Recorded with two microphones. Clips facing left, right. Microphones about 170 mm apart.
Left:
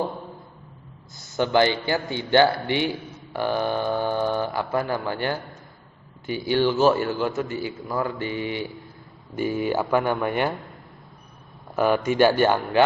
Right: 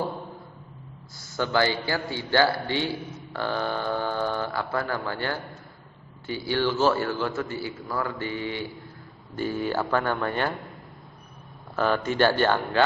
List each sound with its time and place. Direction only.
1.2 s a man's voice: 20° left (ahead or behind)
11.8 s a man's voice: 15° left (ahead or behind)